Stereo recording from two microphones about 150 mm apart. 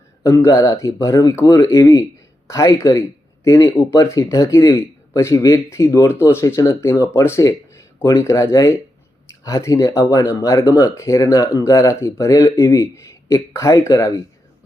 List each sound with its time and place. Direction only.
0.2 s speech: 20° left (ahead or behind)